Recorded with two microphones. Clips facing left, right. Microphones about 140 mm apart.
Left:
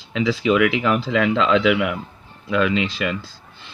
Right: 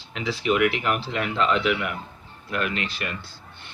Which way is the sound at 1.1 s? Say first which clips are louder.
Left 7 dB; 90° left.